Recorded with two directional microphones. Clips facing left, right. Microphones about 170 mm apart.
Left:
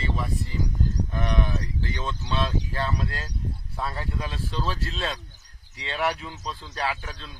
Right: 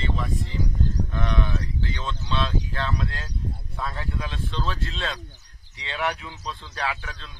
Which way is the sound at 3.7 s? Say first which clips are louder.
Left 1 dB; 5° left (ahead or behind).